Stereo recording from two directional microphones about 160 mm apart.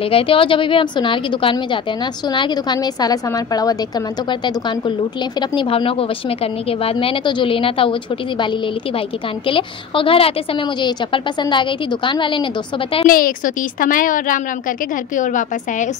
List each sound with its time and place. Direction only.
0.1 s a woman's voice: 35° left (ahead or behind)
9.5 s a woman's voice: 35° left (ahead or behind)
13.0 s a woman's voice: 60° left (ahead or behind)